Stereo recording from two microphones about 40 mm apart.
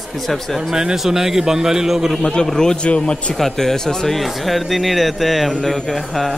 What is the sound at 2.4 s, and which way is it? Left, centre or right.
Speech, centre.